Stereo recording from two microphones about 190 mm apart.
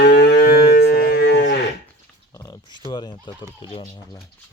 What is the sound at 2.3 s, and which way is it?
Speech, 15° left (ahead or behind).